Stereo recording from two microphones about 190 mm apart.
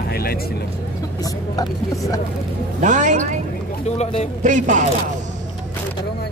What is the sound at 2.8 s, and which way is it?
Speech, 40° right (ahead or behind).